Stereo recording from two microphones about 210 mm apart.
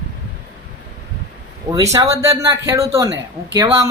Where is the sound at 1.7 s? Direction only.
15° right (ahead or behind).